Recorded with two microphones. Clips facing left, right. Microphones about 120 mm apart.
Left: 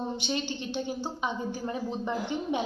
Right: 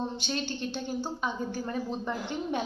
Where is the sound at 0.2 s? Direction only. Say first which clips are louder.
Left 1 dB; 15° left (ahead or behind).